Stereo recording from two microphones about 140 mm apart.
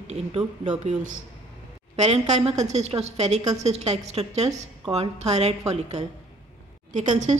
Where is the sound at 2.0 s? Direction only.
50° right (ahead or behind).